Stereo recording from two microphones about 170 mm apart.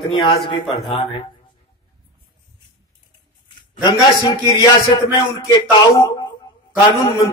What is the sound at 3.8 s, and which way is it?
Speech, 25° left (ahead or behind).